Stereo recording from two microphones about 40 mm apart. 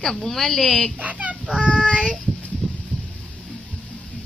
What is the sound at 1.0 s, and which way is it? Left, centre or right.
Speech, right.